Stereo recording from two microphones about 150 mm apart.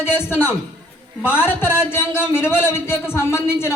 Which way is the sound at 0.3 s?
15° left (ahead or behind).